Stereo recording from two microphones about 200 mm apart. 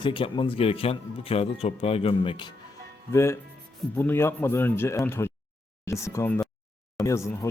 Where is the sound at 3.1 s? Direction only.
15° left (ahead or behind).